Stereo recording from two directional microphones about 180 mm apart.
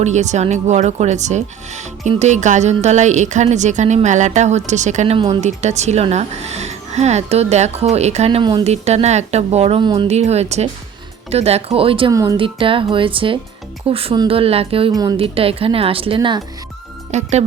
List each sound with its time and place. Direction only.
0.0 s speech: 40° right (ahead or behind)
12.1 s speech: 20° right (ahead or behind)
12.4 s speech: 30° right (ahead or behind)
17.1 s speech: 40° right (ahead or behind)